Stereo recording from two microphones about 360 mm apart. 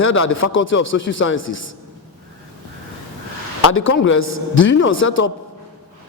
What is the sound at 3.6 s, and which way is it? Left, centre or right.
A man's voice, left.